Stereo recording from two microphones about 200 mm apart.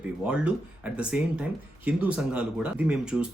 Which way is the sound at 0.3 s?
5° right (ahead or behind).